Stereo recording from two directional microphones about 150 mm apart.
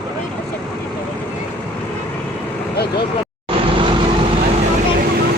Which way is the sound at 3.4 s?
35° right (ahead or behind).